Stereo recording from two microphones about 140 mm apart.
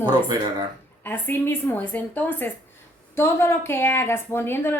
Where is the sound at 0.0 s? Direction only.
30° right (ahead or behind).